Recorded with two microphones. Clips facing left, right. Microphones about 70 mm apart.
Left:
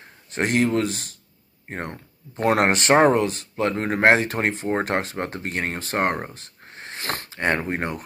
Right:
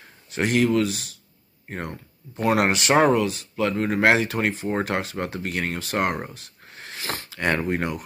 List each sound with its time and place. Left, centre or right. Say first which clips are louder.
0.3 s speech: even; left
7.0 s sniff: left 2 dB; left
7.2 s speech: even; left